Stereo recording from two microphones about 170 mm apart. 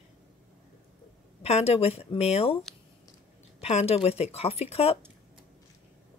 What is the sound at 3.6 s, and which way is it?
Speech, 35° left (ahead or behind).